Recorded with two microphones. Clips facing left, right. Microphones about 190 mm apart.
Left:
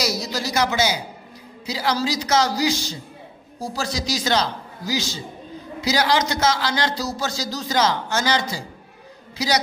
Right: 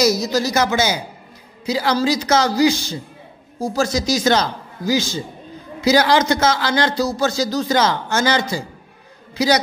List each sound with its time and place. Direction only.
0.0 s a man's voice: 45° right (ahead or behind)